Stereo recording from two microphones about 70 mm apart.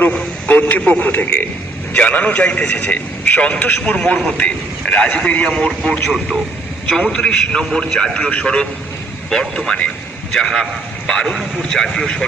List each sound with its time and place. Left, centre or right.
0.1 s a man's voice: left
10.3 s a man's voice: centre